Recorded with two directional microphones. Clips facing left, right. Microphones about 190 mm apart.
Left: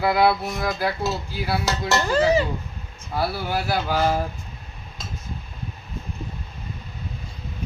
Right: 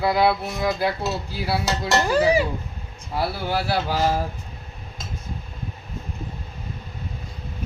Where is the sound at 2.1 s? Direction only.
10° right (ahead or behind).